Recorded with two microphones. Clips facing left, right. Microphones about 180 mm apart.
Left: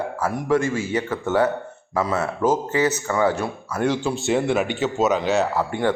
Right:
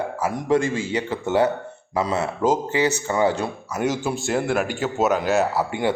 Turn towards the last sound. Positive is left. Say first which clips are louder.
# even
turn(degrees=-5)  # may be behind; listen again after turning